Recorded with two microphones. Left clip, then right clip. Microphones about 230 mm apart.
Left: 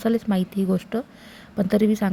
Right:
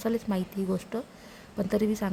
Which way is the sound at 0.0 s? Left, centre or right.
Centre.